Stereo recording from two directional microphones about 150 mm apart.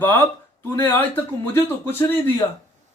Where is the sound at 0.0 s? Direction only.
15° left (ahead or behind).